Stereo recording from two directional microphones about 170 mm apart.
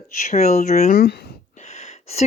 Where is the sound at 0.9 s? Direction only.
65° left (ahead or behind).